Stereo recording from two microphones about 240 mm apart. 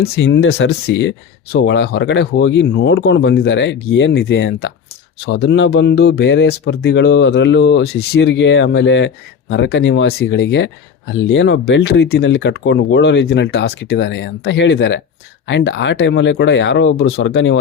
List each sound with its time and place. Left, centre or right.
0.0 s speech: left